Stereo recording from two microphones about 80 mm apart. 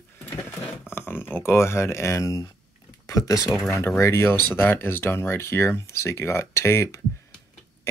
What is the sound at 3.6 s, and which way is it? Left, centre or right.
Speech, left.